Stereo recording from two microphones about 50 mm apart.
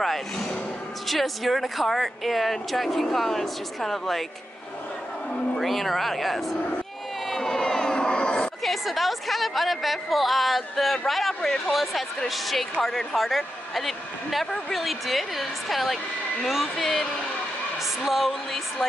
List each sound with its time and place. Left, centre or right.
0.0 s a woman's voice: centre
5.3 s a woman's voice: centre
7.2 s a sound: centre
8.6 s a woman's voice: centre
18.0 s a woman's voice: centre